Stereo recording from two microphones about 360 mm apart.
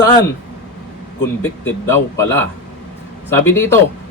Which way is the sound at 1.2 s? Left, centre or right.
Centre.